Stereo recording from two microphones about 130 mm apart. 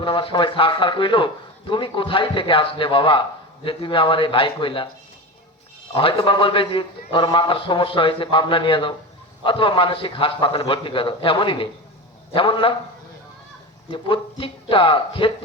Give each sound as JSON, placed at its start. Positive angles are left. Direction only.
{"t": 0.0, "sound": "a man's voice", "side_deg": 40}
{"t": 5.9, "sound": "a man's voice", "side_deg": 45}
{"t": 13.9, "sound": "a man's voice", "side_deg": 45}